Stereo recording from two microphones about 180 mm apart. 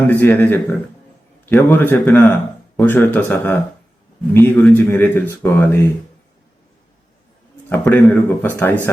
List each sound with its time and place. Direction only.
0.1 s a man's voice: 10° left (ahead or behind)
7.7 s a man's voice: 10° left (ahead or behind)